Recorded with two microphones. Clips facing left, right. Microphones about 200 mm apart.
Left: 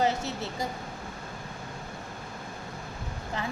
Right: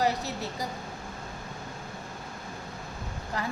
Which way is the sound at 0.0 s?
25° left (ahead or behind).